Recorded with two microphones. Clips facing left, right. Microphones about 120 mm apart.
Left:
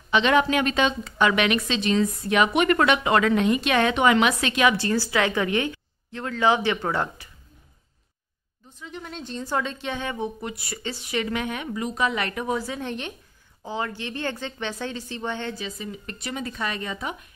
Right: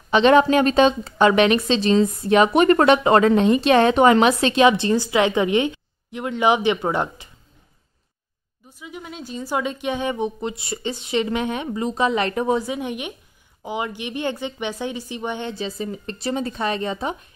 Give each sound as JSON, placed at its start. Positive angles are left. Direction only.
{"t": 0.1, "sound": "a woman's voice", "side_deg": -35}
{"t": 8.6, "sound": "speech", "side_deg": -10}
{"t": 12.6, "sound": "a woman's voice", "side_deg": -15}
{"t": 15.5, "sound": "a woman's voice", "side_deg": -35}